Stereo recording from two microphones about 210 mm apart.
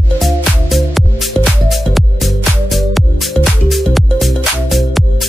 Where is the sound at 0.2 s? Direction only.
Centre (ahead or behind).